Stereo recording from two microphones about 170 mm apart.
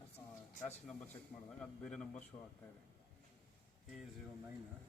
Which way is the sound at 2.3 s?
25° left (ahead or behind).